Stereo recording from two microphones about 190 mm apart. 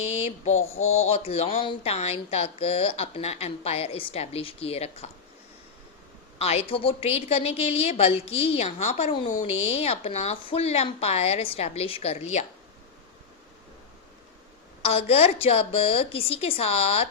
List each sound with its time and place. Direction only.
0.0 s a sound: 35° left (ahead or behind)
0.8 s speech: 90° left
1.1 s speech: 30° left (ahead or behind)
6.4 s speech: 35° left (ahead or behind)
14.8 s speech: 30° left (ahead or behind)